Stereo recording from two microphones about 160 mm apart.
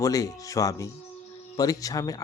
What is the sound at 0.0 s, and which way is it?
Speech, 20° left (ahead or behind).